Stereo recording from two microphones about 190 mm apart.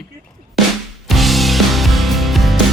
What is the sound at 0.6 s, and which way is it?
Music, centre (ahead or behind).